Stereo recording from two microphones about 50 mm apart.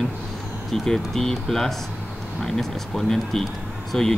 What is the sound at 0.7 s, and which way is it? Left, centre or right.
Speech, centre.